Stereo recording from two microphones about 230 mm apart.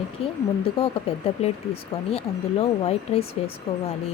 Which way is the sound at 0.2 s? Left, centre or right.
Left.